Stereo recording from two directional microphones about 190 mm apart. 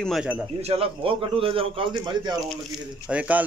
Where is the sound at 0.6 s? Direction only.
30° right (ahead or behind).